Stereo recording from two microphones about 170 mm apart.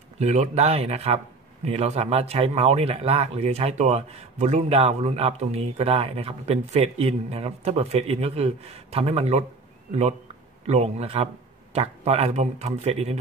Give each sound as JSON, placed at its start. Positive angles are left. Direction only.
{"t": 0.2, "sound": "a man's voice", "side_deg": -40}
{"t": 10.7, "sound": "a man's voice", "side_deg": -40}